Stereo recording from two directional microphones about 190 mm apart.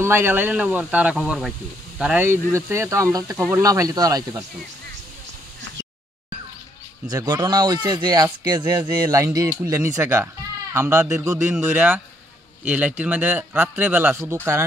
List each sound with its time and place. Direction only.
0.0 s speech: 10° right (ahead or behind)
7.1 s speech: 20° right (ahead or behind)